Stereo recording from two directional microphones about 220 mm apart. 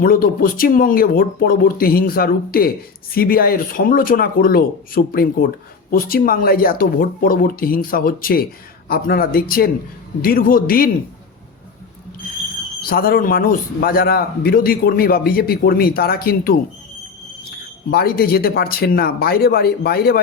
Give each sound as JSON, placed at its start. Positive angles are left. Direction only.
{"t": 0.0, "sound": "speech", "side_deg": 40}
{"t": 12.9, "sound": "a man's voice", "side_deg": 40}
{"t": 17.9, "sound": "a man's voice", "side_deg": 45}